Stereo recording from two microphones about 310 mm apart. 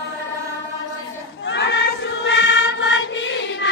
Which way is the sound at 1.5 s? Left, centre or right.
Left.